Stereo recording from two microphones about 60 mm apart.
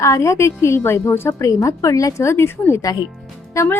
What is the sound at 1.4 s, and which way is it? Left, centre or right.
Speech, left.